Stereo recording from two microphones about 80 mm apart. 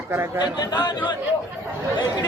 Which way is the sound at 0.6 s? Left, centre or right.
Left.